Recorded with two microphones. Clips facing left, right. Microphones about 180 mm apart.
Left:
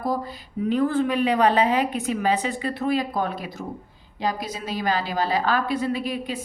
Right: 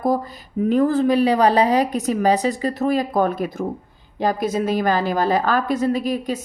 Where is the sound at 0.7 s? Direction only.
40° right (ahead or behind).